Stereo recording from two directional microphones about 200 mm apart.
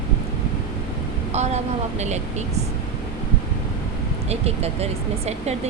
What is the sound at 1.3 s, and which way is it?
Speech, 35° right (ahead or behind).